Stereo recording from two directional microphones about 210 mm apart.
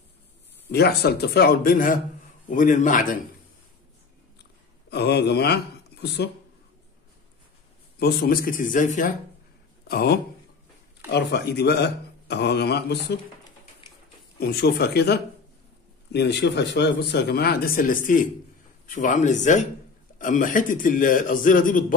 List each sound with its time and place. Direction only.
0.7 s a man's voice: 50° left (ahead or behind)
4.4 s a sound: 50° left (ahead or behind)
8.0 s a man's voice: 45° left (ahead or behind)
9.8 s speech: 50° left (ahead or behind)
14.4 s a man's voice: 50° left (ahead or behind)